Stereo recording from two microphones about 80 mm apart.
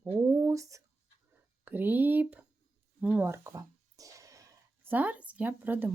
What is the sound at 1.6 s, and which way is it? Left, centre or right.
A woman's voice, right.